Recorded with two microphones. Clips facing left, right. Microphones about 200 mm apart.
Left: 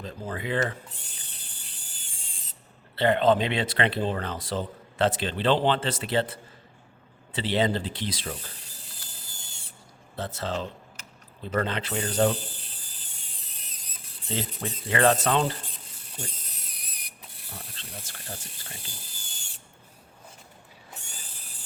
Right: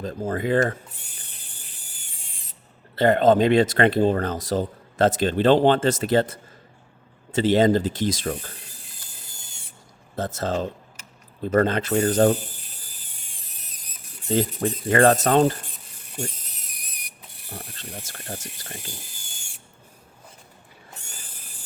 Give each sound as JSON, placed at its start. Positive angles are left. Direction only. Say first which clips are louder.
{"t": 0.0, "sound": "speech", "louder": "right 8 dB", "side_deg": -45}
{"t": 2.9, "sound": "speech", "louder": "right 4 dB", "side_deg": -45}
{"t": 10.2, "sound": "speech", "louder": "right 6 dB", "side_deg": -45}
{"t": 14.3, "sound": "speech", "louder": "right 10 dB", "side_deg": -45}
{"t": 18.0, "sound": "speech", "louder": "right 6 dB", "side_deg": -45}